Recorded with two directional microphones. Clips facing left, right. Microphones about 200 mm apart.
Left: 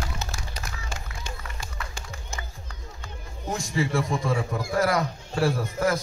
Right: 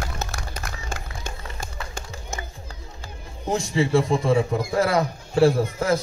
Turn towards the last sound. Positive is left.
turn(degrees=-25)  # may be behind; listen again after turning